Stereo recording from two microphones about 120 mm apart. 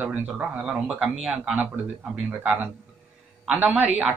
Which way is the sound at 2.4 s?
15° right (ahead or behind).